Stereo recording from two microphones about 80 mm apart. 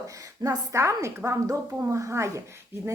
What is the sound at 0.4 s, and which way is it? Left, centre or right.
Speech, right.